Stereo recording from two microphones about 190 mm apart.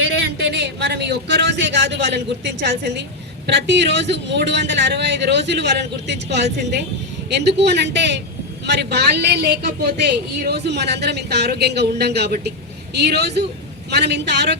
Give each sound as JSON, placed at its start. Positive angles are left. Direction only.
{"t": 0.0, "sound": "a man's voice", "side_deg": -65}